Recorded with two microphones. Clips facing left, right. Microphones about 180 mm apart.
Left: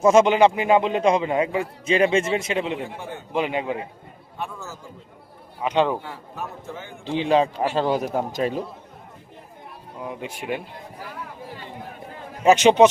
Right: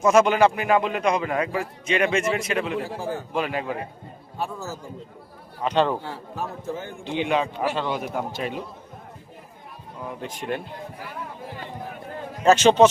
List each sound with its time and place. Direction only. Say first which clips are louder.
0.0 s a man's voice: left 2 dB; 20° left (ahead or behind)
3.0 s a man's voice: right 5 dB; 35° right (ahead or behind)
3.3 s a man's voice: left 5 dB; 20° left (ahead or behind)
4.4 s a man's voice: right 3 dB; 35° right (ahead or behind)
5.6 s speech: left 1 dB; 10° left (ahead or behind)
7.1 s a man's voice: left 4 dB; 35° left (ahead or behind)
10.0 s speech: left 1 dB; 10° left (ahead or behind)
12.5 s speech: left 1 dB; 15° left (ahead or behind)